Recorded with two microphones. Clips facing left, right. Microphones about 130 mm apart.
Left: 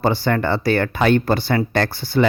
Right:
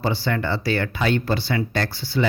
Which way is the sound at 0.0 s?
50° left (ahead or behind).